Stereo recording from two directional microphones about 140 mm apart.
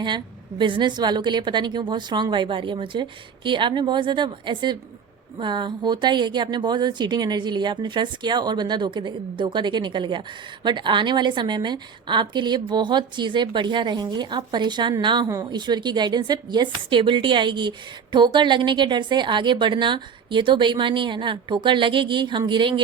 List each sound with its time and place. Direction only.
0.6 s speech: 35° right (ahead or behind)